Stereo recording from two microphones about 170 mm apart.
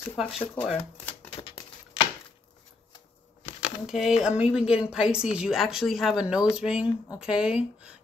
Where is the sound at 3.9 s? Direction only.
5° right (ahead or behind).